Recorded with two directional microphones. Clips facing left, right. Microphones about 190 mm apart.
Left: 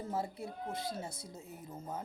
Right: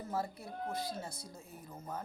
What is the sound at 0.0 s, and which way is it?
Speech, 25° left (ahead or behind).